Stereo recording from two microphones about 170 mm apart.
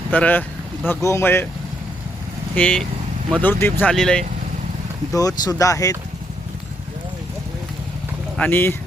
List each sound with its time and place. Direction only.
0.1 s speech: 10° left (ahead or behind)
2.6 s speech: 5° left (ahead or behind)
5.1 s speech: 20° left (ahead or behind)
8.4 s speech: 10° left (ahead or behind)